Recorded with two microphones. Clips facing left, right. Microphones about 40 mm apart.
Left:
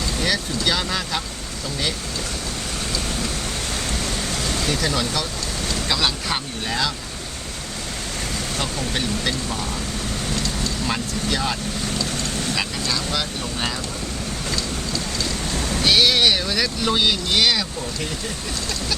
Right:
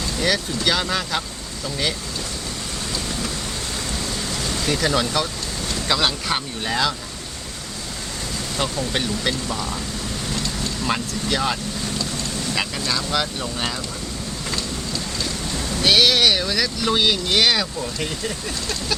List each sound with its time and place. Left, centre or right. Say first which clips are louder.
0.2 s speech: right 2 dB; centre
3.8 s a sound: left 1 dB; left
4.7 s speech: right 5 dB; centre
8.5 s speech: right 3 dB; centre
10.8 s speech: right 3 dB; centre
12.5 s speech: right 1 dB; centre
15.5 s ocean: left 3 dB; left
15.8 s speech: right 1 dB; centre